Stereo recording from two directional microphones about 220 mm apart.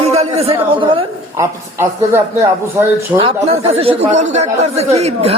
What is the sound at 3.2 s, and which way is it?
Speech, 25° right (ahead or behind).